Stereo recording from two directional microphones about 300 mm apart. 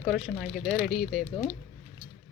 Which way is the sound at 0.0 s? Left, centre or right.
Centre.